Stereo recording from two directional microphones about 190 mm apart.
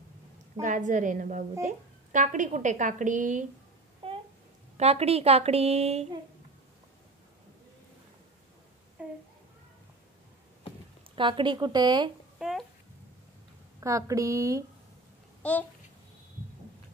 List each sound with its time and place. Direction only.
0.6 s a woman's voice: 40° right (ahead or behind)
4.0 s babbling: 30° right (ahead or behind)
4.7 s a woman's voice: 35° right (ahead or behind)
9.0 s a sound: 5° right (ahead or behind)
11.1 s speech: 25° right (ahead or behind)
12.4 s speech: centre (ahead or behind)
13.7 s a woman's voice: 15° right (ahead or behind)
15.4 s a child's voice: 5° left (ahead or behind)